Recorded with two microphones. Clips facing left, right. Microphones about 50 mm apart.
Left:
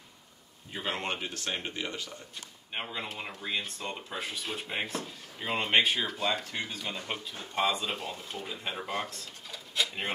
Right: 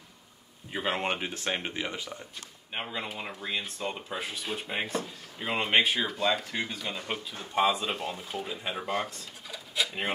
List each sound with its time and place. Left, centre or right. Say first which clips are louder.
0.7 s speech: right 4 dB; centre
2.7 s speech: right 2 dB; centre